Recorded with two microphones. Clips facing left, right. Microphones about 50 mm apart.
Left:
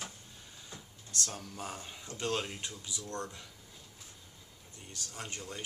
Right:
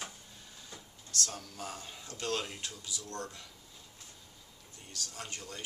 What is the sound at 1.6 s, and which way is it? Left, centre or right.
Speech, left.